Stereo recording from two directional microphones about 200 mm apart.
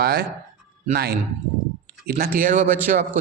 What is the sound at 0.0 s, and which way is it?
A man's voice, 50° right (ahead or behind).